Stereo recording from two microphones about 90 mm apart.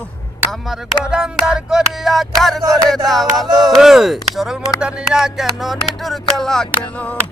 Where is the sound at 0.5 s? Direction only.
Centre (ahead or behind).